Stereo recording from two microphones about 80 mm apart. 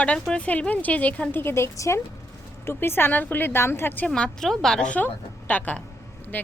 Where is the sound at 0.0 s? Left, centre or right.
Centre.